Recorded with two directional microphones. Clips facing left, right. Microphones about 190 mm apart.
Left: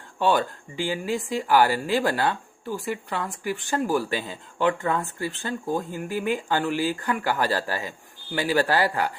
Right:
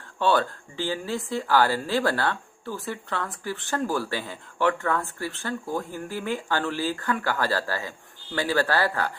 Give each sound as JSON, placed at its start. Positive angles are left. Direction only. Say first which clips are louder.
{"t": 0.2, "sound": "speech", "louder": "left 1 dB", "side_deg": 15}